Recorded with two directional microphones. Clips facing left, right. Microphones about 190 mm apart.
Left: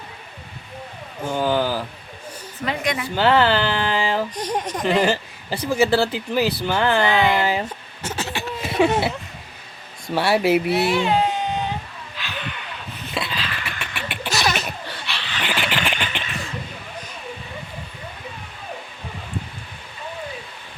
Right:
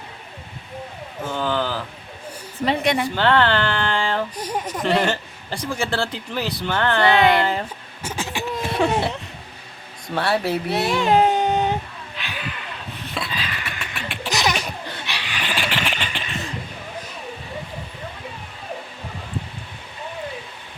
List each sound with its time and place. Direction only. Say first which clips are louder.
1.2 s speech: left 3 dB; 10° left (ahead or behind)
2.6 s a woman's voice: right 4 dB; 30° right (ahead or behind)
3.2 s speech: left 4 dB; 5° left (ahead or behind)
4.4 s speech: left 2 dB; 5° right (ahead or behind)
4.9 s speech: left 2 dB; 5° left (ahead or behind)
8.0 s a sound: even; 10° right (ahead or behind)
8.8 s speech: left 3 dB; 5° left (ahead or behind)
10.2 s speech: left 4 dB; 10° left (ahead or behind)
10.8 s speech: right 1 dB; 45° right (ahead or behind)
12.1 s a sound: even; 15° right (ahead or behind)
12.4 s a sound: even; centre (ahead or behind)
14.3 s laughter: even; 15° right (ahead or behind)
15.6 s a sound: left 1 dB; centre (ahead or behind)